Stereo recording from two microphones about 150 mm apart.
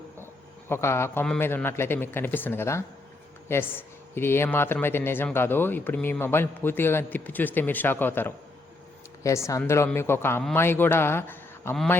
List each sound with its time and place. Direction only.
0.7 s speech: 15° left (ahead or behind)